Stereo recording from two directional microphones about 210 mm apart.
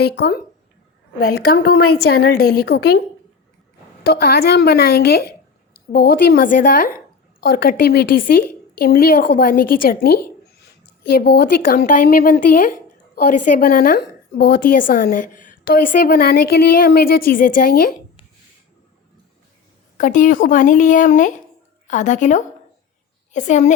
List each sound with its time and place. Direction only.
0.0 s a woman's voice: 50° left (ahead or behind)
4.0 s a woman's voice: 45° left (ahead or behind)
20.0 s speech: 40° left (ahead or behind)